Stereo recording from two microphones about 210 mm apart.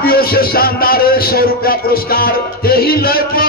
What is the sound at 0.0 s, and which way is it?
Speech, 45° left (ahead or behind).